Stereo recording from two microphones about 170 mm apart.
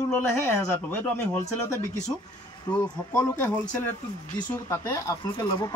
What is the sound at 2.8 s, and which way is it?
Speech, 20° left (ahead or behind).